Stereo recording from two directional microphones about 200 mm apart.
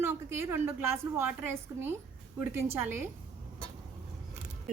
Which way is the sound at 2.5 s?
10° right (ahead or behind).